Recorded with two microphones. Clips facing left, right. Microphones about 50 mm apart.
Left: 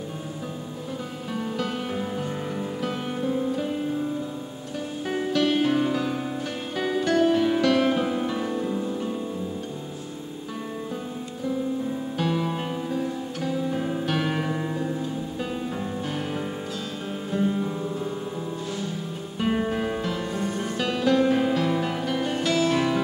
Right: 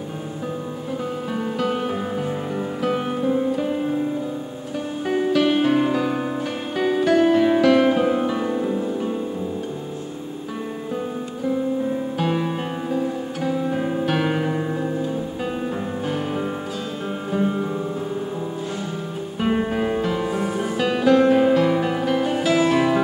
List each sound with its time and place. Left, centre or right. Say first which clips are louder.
1.6 s music: right 7 dB; centre
5.0 s music: right 5 dB; centre
6.8 s music: right 5 dB; centre
12.3 s music: right 2 dB; right
12.9 s music: right 4 dB; centre
17.3 s music: right 2 dB; right
19.4 s music: right 3 dB; centre